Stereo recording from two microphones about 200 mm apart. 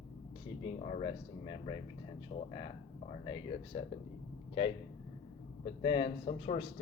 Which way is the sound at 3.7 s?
30° left (ahead or behind).